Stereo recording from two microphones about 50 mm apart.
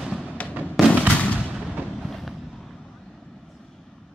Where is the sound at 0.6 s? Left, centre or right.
Right.